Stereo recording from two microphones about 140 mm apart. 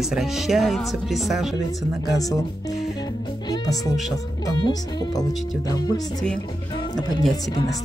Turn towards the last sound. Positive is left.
turn(degrees=30)  # may be behind; listen again after turning